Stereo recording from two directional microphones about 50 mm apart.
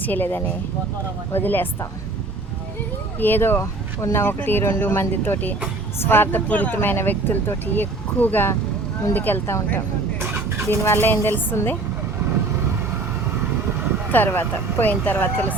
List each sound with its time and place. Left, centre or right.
0.0 s speech: left
3.2 s speech: left
3.6 s speech: left
4.4 s speech: left
6.8 s speech: left
10.8 s speech: left
14.1 s speech: left